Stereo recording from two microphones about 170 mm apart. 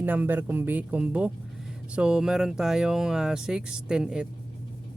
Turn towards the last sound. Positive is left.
turn(degrees=-5)  # may be behind; listen again after turning